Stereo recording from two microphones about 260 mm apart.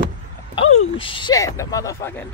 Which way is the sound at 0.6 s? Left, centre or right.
Left.